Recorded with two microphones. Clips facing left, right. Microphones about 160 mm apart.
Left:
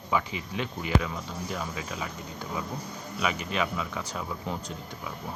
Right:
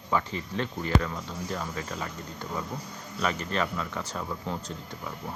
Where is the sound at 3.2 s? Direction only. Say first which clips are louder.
Right 1 dB; 10° left (ahead or behind).